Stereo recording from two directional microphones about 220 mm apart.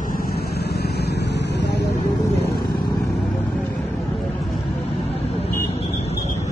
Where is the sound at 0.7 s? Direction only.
45° left (ahead or behind).